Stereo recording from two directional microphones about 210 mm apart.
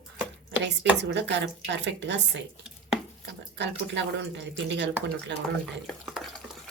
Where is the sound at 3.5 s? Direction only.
55° right (ahead or behind).